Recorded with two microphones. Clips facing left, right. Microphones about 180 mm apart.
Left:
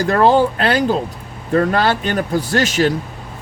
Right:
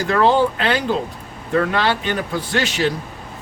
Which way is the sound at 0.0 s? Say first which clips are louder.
Left 3 dB; 40° left (ahead or behind).